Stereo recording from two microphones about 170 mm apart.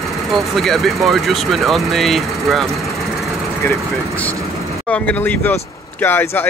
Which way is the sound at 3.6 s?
10° left (ahead or behind).